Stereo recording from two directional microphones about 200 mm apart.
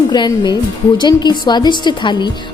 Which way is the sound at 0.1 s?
20° left (ahead or behind).